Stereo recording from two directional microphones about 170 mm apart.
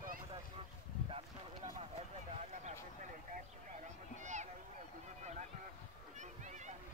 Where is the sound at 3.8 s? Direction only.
45° right (ahead or behind).